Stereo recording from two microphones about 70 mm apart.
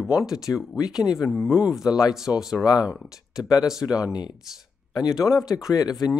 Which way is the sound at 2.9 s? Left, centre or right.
Centre.